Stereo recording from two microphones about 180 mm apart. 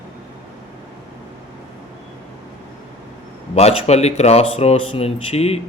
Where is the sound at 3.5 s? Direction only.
35° left (ahead or behind).